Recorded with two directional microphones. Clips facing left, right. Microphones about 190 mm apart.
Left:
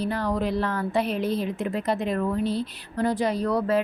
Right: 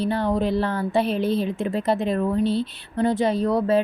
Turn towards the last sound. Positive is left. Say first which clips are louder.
# right 3 dB
turn(degrees=-25)  # may be behind; listen again after turning